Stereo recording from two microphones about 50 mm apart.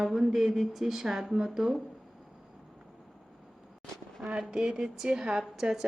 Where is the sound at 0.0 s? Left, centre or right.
Centre.